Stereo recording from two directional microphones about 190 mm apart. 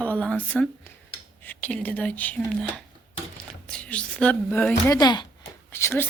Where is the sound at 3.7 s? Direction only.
5° left (ahead or behind).